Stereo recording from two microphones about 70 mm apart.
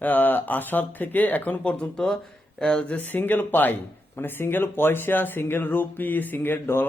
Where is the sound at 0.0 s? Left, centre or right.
Left.